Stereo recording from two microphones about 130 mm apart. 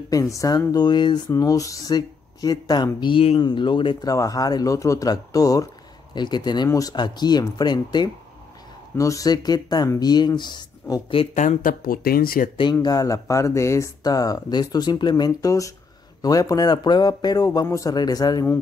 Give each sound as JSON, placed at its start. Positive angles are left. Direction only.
{"t": 0.1, "sound": "speech", "side_deg": 25}
{"t": 11.3, "sound": "speech", "side_deg": 80}
{"t": 12.8, "sound": "speech", "side_deg": 30}